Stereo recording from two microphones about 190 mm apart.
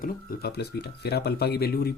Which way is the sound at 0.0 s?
50° left (ahead or behind).